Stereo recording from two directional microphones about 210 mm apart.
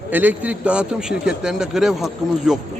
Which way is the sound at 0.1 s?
10° right (ahead or behind).